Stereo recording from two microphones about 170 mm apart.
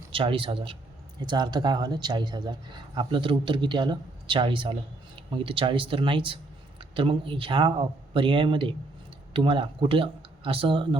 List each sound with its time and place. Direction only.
0.1 s a man's voice: 30° right (ahead or behind)